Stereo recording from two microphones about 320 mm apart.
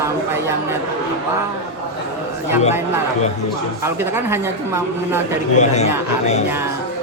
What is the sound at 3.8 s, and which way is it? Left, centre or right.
Speech, centre.